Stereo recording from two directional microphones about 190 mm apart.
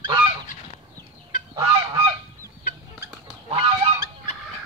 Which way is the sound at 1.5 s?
25° right (ahead or behind).